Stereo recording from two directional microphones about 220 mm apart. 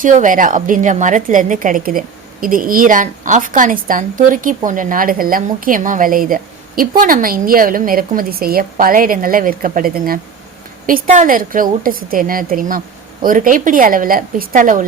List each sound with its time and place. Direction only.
0.0 s a woman's voice: 35° right (ahead or behind)